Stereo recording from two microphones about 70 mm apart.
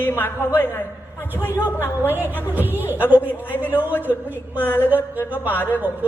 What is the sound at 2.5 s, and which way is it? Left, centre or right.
Speech, right.